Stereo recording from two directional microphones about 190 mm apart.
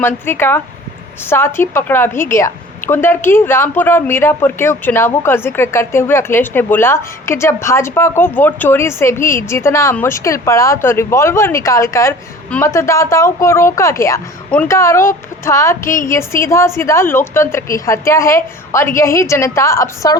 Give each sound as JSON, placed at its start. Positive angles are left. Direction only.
{"t": 0.0, "sound": "a woman's voice", "side_deg": 10}